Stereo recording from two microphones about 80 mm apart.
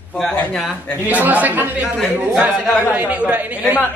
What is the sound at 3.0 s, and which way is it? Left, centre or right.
Speech, centre.